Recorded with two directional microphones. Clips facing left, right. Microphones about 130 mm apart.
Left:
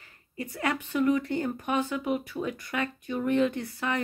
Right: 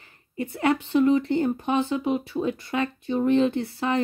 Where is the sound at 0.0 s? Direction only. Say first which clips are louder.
Right 6 dB; 25° right (ahead or behind).